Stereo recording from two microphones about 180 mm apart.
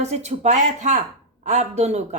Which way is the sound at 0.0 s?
40° right (ahead or behind).